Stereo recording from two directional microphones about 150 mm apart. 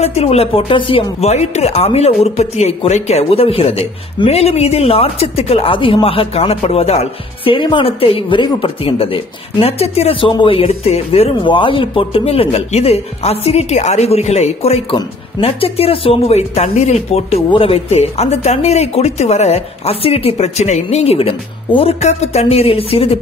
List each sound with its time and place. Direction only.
0.0 s speech: 45° left (ahead or behind)